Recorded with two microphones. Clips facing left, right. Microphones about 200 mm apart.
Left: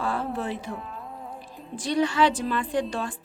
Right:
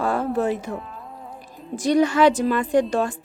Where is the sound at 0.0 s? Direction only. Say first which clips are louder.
Right 7 dB; 45° right (ahead or behind).